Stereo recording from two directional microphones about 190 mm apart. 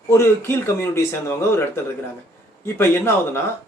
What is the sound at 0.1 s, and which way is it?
Speech, 15° left (ahead or behind).